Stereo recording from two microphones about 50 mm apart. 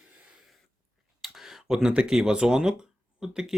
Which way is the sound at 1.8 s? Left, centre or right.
Centre.